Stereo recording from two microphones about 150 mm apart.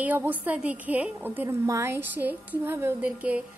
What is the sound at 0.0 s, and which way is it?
A woman's voice, 10° right (ahead or behind).